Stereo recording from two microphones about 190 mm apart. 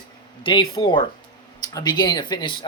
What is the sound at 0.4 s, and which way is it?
Speech, 25° left (ahead or behind).